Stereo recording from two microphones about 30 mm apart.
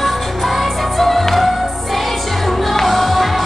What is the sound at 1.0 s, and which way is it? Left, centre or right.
Music, centre.